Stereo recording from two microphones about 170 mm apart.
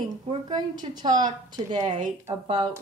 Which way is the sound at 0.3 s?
25° right (ahead or behind).